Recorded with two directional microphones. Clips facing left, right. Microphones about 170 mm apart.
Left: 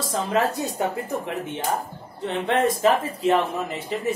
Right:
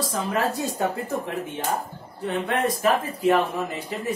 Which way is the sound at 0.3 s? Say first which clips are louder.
Left 3 dB; 20° left (ahead or behind).